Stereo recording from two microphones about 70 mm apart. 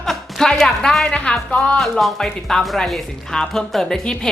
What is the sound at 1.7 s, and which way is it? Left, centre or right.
A woman's voice, centre.